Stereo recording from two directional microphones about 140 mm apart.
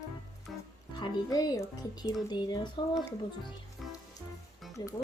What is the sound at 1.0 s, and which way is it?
Speech, 25° left (ahead or behind).